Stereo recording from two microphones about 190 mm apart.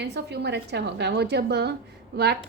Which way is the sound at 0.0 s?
60° right (ahead or behind).